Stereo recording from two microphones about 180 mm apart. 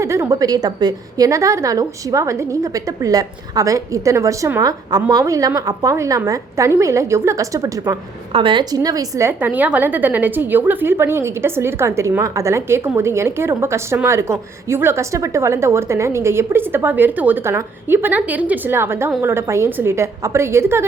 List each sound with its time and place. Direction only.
0.0 s a woman's voice: 15° right (ahead or behind)
8.3 s a woman's voice: 30° right (ahead or behind)